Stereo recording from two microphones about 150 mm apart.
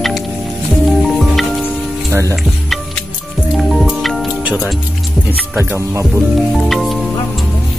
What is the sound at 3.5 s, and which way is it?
Music, centre (ahead or behind).